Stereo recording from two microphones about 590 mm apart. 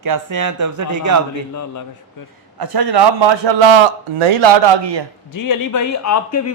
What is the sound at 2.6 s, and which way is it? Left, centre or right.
Speech, right.